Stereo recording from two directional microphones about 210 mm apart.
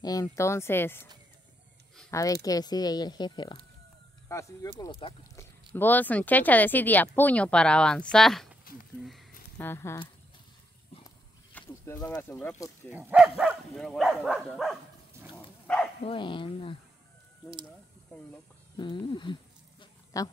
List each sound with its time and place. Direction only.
0.0 s speech: 15° left (ahead or behind)
2.0 s speech: 15° left (ahead or behind)
9.6 s speech: 10° left (ahead or behind)
11.5 s speech: 10° left (ahead or behind)
12.9 s speech: 5° right (ahead or behind)
15.6 s bow-wow: 5° left (ahead or behind)
16.0 s speech: 25° left (ahead or behind)
18.8 s speech: 20° left (ahead or behind)
19.8 s a sound: 15° left (ahead or behind)